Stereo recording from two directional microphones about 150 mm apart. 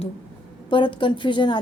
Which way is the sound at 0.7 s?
35° left (ahead or behind).